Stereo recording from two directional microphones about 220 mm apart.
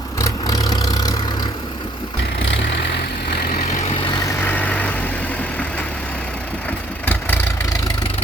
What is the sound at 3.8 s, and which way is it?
Vehicle, 20° left (ahead or behind).